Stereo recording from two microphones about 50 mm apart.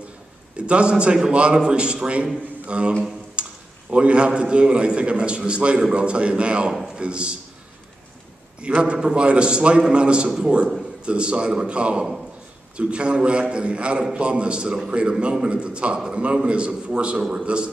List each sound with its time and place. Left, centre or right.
0.6 s a man's voice: right
3.4 s a sound: right
3.9 s a man's voice: right
8.5 s a man's voice: right